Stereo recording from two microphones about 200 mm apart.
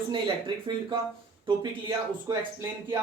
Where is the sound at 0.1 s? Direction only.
25° right (ahead or behind).